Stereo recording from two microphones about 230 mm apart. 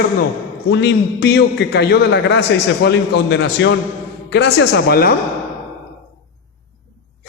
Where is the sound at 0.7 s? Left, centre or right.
Left.